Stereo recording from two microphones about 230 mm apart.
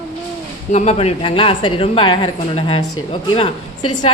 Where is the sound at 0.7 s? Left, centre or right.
Left.